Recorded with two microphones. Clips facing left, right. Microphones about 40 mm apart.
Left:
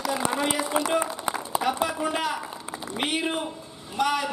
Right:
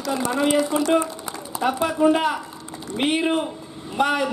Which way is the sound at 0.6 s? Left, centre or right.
Centre.